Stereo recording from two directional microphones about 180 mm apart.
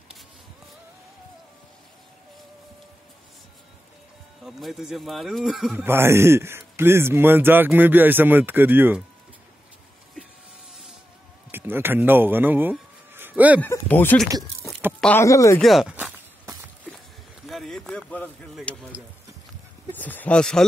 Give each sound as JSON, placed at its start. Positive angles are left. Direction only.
{"t": 4.5, "sound": "speech", "side_deg": 0}
{"t": 11.5, "sound": "a sound", "side_deg": -10}
{"t": 13.6, "sound": "speech", "side_deg": 10}
{"t": 15.6, "sound": "speech", "side_deg": 0}
{"t": 17.5, "sound": "a sound", "side_deg": 0}
{"t": 20.0, "sound": "speech", "side_deg": 10}